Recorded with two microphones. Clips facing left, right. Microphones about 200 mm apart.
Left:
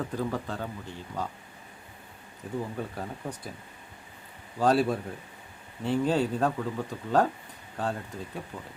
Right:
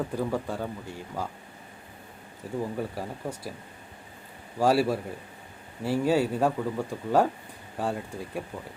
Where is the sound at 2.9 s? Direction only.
5° right (ahead or behind).